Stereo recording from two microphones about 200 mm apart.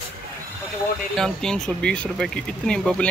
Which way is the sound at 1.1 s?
Centre (ahead or behind).